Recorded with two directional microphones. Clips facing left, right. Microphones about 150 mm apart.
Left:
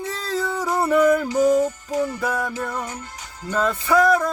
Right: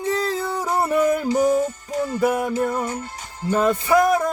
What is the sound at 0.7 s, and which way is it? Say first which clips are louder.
Music: left 2 dB; 15° right (ahead or behind).